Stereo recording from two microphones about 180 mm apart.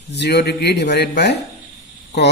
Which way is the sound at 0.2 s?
70° left (ahead or behind).